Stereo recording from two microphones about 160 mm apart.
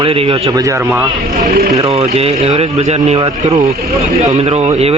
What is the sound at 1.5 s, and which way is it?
Speech, 70° right (ahead or behind).